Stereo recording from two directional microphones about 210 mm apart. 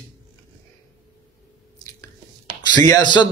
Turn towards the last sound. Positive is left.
turn(degrees=20)  # may be behind; listen again after turning